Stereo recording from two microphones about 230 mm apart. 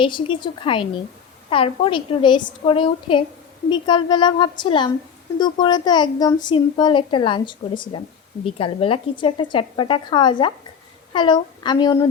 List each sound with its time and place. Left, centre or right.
0.0 s a woman's voice: left